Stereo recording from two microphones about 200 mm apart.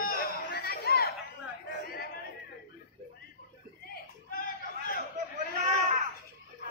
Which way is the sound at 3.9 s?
45° left (ahead or behind).